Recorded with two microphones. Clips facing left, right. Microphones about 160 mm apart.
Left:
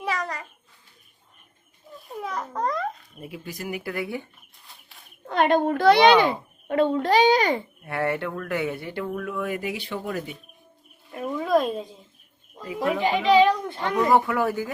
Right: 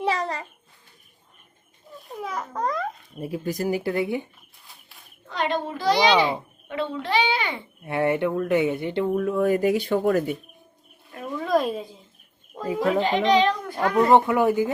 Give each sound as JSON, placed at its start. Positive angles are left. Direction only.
{"t": 0.0, "sound": "a sound", "side_deg": -30}
{"t": 2.1, "sound": "babbling", "side_deg": 0}
{"t": 3.2, "sound": "speech", "side_deg": -40}
{"t": 5.3, "sound": "a child's voice", "side_deg": 55}
{"t": 7.9, "sound": "speech", "side_deg": -20}
{"t": 11.3, "sound": "a sound", "side_deg": 0}
{"t": 13.0, "sound": "a child's voice", "side_deg": 10}
{"t": 13.9, "sound": "speech", "side_deg": -25}